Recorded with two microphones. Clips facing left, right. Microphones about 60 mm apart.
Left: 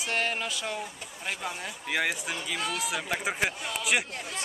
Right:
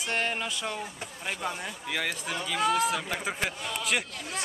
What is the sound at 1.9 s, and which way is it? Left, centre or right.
Speech, centre.